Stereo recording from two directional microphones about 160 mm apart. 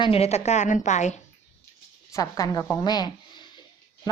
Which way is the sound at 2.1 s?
20° left (ahead or behind).